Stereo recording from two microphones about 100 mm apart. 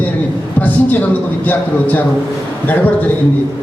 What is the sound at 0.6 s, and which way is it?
Speech, 15° left (ahead or behind).